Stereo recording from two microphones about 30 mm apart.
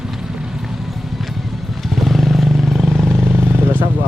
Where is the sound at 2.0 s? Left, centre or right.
Centre.